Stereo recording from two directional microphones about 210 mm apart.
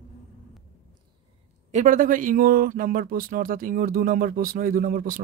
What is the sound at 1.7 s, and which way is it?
Speech, 35° right (ahead or behind).